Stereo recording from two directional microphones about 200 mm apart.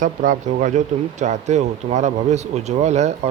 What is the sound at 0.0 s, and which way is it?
Speech, 40° right (ahead or behind).